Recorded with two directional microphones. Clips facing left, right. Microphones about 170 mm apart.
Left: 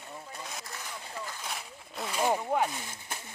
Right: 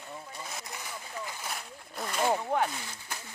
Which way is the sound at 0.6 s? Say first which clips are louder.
Right 1 dB; 15° right (ahead or behind).